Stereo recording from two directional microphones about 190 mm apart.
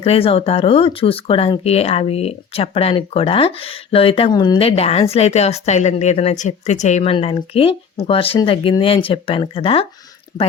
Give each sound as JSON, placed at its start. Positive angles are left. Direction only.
{"t": 0.0, "sound": "speech", "side_deg": 30}